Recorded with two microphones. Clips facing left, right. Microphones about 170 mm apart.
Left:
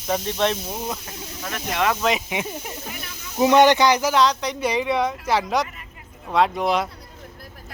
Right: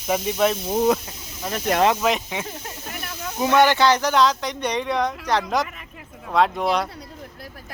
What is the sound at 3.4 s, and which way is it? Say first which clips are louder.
Speech: left 2 dB; 20° left (ahead or behind).